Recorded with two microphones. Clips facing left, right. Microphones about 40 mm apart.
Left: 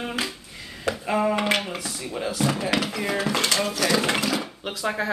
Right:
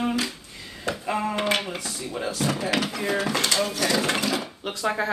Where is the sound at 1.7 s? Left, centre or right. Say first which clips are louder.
Even; centre.